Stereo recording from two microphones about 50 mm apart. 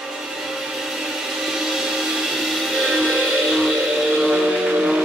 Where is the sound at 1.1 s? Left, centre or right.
Centre.